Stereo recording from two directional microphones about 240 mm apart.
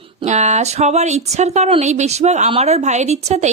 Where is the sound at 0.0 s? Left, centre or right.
Right.